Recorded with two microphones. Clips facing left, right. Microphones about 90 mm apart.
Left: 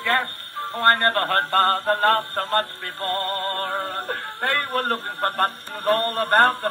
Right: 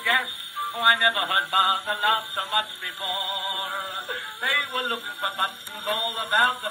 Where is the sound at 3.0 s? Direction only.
45° left (ahead or behind).